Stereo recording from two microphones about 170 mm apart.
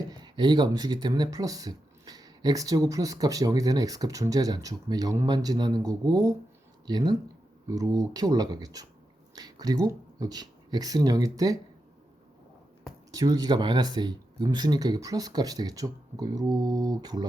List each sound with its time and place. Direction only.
0.0 s speech: 25° right (ahead or behind)
13.1 s speech: 20° right (ahead or behind)